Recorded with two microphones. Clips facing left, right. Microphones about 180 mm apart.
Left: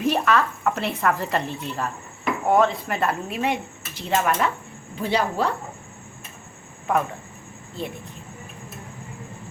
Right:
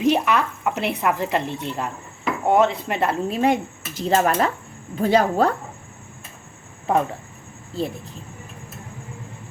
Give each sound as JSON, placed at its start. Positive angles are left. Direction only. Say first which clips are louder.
{"t": 0.0, "sound": "speech", "louder": "right 2 dB", "side_deg": -15}
{"t": 3.2, "sound": "dishes", "louder": "right 6 dB", "side_deg": -40}
{"t": 4.9, "sound": "a woman's voice", "louder": "right 6 dB", "side_deg": -45}
{"t": 6.9, "sound": "speech", "louder": "right 2 dB", "side_deg": -30}